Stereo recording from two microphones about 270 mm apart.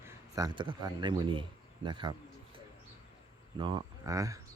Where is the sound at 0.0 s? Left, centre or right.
Centre.